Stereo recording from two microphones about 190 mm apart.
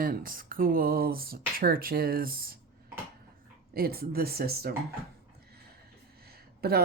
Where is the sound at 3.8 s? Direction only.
50° right (ahead or behind).